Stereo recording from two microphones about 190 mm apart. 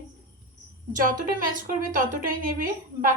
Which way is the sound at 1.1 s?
45° right (ahead or behind).